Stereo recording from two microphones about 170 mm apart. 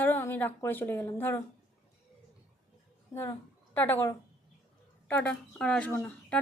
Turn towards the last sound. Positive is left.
turn(degrees=10)  # may be behind; listen again after turning